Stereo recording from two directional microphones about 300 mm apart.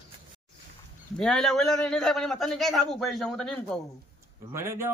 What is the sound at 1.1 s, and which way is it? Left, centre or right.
A man's voice, centre.